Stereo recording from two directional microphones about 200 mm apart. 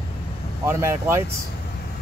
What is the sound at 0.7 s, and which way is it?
Speech, 15° right (ahead or behind).